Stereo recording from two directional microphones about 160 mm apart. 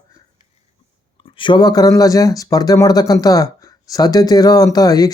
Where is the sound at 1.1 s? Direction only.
30° left (ahead or behind).